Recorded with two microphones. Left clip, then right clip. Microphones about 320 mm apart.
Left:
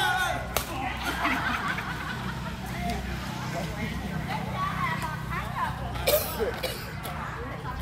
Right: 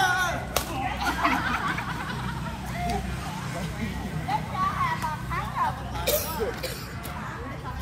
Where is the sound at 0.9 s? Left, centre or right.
Centre.